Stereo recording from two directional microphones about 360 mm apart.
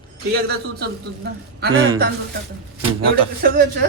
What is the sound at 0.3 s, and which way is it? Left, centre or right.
A man's voice, right.